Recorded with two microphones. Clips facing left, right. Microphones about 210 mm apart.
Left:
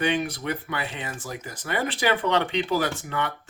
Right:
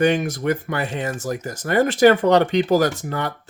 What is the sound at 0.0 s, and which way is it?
Speech, 45° right (ahead or behind).